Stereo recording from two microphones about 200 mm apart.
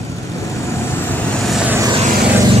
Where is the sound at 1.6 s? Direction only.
10° right (ahead or behind).